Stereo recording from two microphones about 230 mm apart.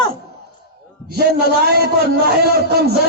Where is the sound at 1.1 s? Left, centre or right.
Right.